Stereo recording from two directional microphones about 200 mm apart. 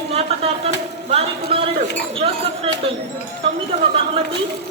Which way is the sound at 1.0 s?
30° right (ahead or behind).